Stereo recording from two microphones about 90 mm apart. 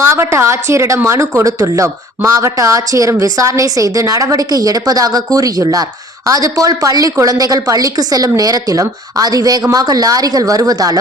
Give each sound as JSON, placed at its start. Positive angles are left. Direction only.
{"t": 0.1, "sound": "a woman's voice", "side_deg": -30}